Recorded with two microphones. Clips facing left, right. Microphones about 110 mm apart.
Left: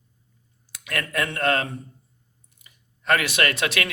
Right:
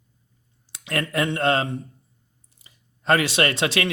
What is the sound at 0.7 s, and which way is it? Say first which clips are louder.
Speech: right 3 dB; 25° right (ahead or behind).